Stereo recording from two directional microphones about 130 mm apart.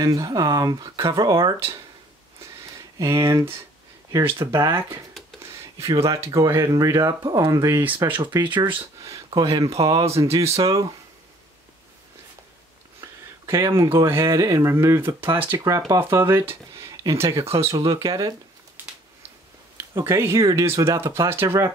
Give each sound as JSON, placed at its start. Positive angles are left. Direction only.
{"t": 0.0, "sound": "speech", "side_deg": -25}
{"t": 3.0, "sound": "speech", "side_deg": -25}
{"t": 9.8, "sound": "speech", "side_deg": -40}
{"t": 10.1, "sound": "speech", "side_deg": -20}
{"t": 13.0, "sound": "speech", "side_deg": -20}
{"t": 18.8, "sound": "a sound", "side_deg": -15}
{"t": 19.8, "sound": "speech", "side_deg": -20}